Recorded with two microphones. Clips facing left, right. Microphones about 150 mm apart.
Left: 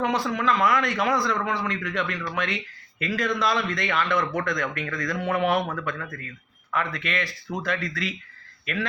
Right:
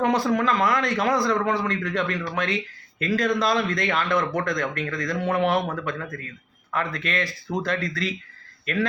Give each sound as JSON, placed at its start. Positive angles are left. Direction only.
{"t": 0.0, "sound": "speech", "side_deg": -45}